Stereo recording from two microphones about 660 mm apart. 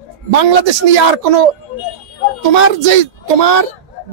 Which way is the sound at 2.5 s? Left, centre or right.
Right.